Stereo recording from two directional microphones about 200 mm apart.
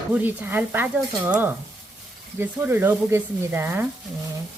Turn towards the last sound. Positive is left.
turn(degrees=-10)  # may be behind; listen again after turning